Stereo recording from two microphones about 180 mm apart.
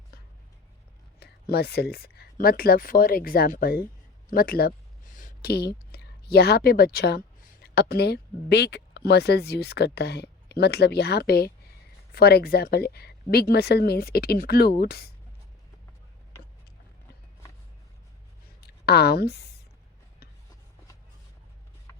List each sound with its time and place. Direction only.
1.2 s speech: 65° left (ahead or behind)
18.6 s speech: 65° left (ahead or behind)